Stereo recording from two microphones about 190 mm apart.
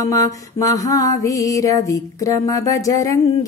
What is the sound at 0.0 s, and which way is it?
Mantra, 15° left (ahead or behind).